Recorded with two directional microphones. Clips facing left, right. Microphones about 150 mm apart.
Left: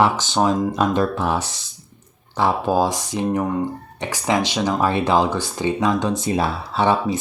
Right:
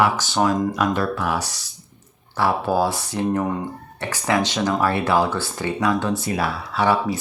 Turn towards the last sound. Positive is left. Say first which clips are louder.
# left 1 dB
turn(degrees=25)  # may be behind; listen again after turning